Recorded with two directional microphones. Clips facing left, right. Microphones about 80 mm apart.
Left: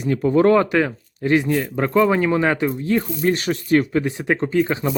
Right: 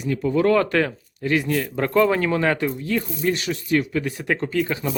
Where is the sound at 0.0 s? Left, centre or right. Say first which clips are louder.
Left 4 dB; left.